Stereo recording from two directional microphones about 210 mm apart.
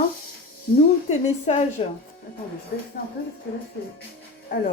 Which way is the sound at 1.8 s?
30° left (ahead or behind).